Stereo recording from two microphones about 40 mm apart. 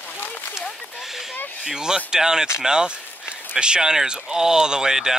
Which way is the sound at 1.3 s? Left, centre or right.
Left.